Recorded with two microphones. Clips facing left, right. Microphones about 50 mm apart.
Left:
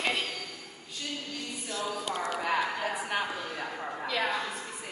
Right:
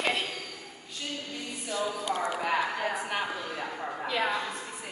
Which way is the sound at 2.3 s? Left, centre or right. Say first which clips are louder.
Right 1 dB; centre.